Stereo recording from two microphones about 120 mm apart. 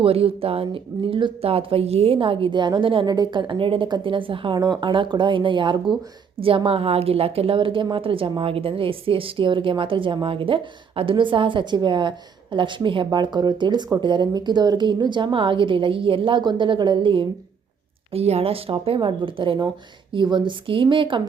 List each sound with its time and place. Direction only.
0.0 s a woman's voice: 50° right (ahead or behind)
18.1 s a woman's voice: 60° right (ahead or behind)